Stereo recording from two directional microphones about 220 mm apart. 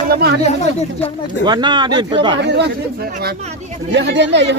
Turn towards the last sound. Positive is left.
turn(degrees=-55)  # may be behind; listen again after turning